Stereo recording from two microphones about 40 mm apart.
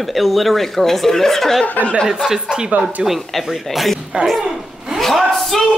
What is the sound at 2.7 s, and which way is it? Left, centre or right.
Speech, right.